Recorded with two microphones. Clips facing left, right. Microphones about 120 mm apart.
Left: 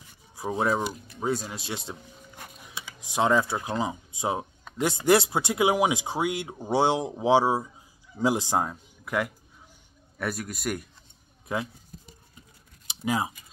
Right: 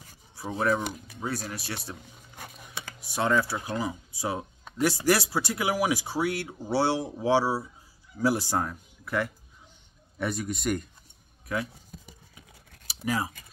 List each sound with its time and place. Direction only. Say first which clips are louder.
0.6 s speech: even; 20° left (ahead or behind)
3.0 s speech: left 3 dB; 15° left (ahead or behind)
10.1 s a man's voice: right 2 dB; centre (ahead or behind)
11.4 s speech: left 1 dB; 25° left (ahead or behind)
12.8 s typing: left 2 dB; 20° left (ahead or behind)